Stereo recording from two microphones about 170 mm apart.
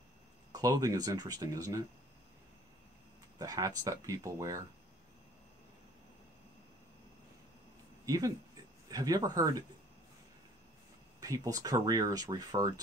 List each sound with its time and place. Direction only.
0.5 s speech: 20° right (ahead or behind)
3.3 s speech: 20° right (ahead or behind)
8.0 s a sound: 20° right (ahead or behind)
8.9 s speech: 20° right (ahead or behind)
11.1 s speech: 20° right (ahead or behind)